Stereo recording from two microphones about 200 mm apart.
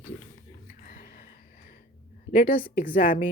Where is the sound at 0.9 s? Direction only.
45° left (ahead or behind).